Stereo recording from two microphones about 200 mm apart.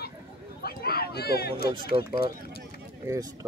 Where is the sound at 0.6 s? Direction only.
50° left (ahead or behind).